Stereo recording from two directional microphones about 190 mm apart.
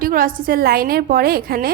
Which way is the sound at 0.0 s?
50° right (ahead or behind).